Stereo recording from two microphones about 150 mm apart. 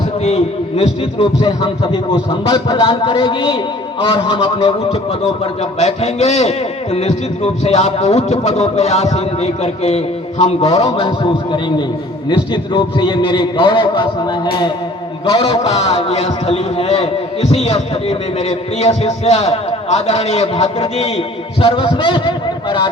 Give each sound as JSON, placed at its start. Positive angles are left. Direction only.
{"t": 0.3, "sound": "a man's voice", "side_deg": 45}
{"t": 12.3, "sound": "a man's voice", "side_deg": 30}